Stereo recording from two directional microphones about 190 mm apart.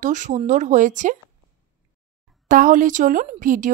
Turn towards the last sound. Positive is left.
turn(degrees=-45)  # may be behind; listen again after turning